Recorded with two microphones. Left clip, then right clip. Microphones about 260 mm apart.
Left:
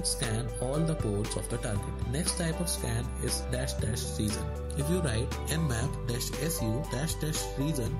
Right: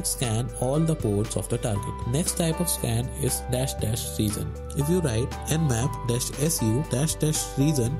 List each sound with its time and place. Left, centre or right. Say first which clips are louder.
0.7 s speech: right 7 dB; centre